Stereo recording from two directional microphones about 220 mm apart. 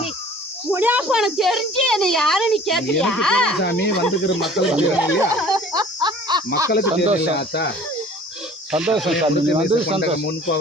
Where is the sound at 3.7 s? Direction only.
50° left (ahead or behind).